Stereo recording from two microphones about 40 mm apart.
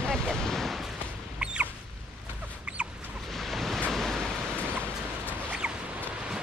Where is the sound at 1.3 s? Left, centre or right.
Right.